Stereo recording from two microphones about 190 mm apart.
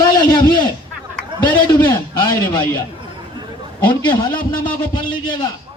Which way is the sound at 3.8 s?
25° left (ahead or behind).